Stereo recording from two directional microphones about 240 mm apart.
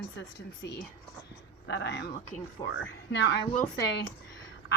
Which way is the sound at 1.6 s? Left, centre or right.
Left.